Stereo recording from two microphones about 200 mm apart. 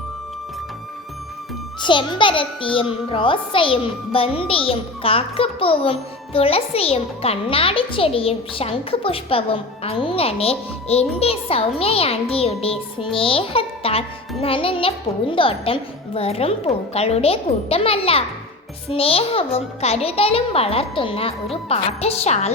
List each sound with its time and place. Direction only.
1.8 s a child's voice: 25° left (ahead or behind)